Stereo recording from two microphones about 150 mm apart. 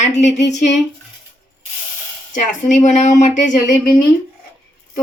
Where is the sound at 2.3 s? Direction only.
55° left (ahead or behind).